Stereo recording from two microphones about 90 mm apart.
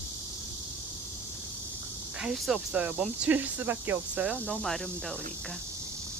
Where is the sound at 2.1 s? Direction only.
5° right (ahead or behind).